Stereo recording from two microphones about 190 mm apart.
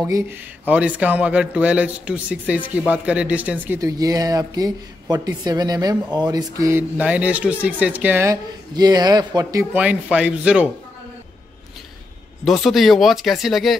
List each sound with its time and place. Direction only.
0.0 s a woman's voice: 10° right (ahead or behind)
9.8 s speech: 5° right (ahead or behind)
12.4 s speech: centre (ahead or behind)